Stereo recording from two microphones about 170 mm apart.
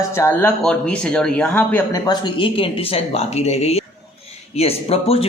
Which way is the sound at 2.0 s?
25° left (ahead or behind).